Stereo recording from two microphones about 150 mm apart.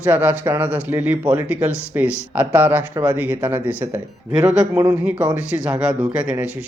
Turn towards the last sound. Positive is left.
turn(degrees=-5)  # may be behind; listen again after turning